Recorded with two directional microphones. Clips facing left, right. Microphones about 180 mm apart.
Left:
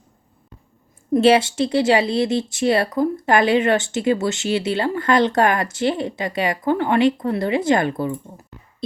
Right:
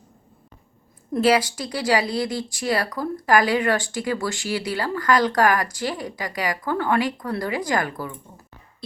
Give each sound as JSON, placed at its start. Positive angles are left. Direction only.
{"t": 1.1, "sound": "a woman's voice", "side_deg": 25}